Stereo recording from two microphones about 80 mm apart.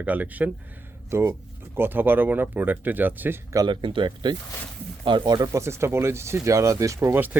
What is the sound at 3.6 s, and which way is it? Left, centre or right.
Speech, right.